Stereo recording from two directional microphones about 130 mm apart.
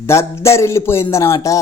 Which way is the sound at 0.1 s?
20° left (ahead or behind).